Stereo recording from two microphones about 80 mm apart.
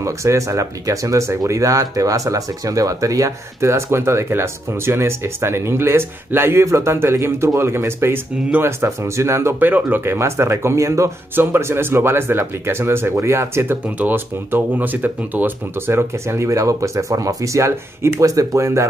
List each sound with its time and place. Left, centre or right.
0.0 s speech: right
13.8 s speech: right